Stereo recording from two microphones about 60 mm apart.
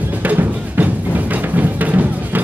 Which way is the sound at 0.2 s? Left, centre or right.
Right.